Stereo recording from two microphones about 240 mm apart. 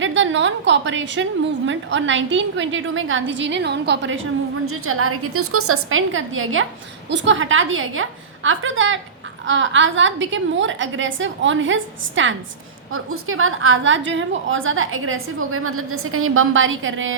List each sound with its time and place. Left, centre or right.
0.0 s a woman's voice: right